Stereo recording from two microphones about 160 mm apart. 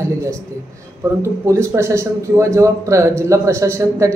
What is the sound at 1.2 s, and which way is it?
A man's voice, 20° right (ahead or behind).